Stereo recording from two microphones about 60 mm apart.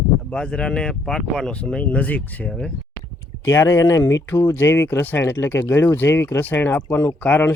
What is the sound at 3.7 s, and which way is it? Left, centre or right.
Speech, left.